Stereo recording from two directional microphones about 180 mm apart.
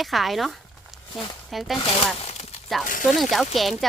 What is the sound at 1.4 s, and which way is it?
Speech, centre (ahead or behind).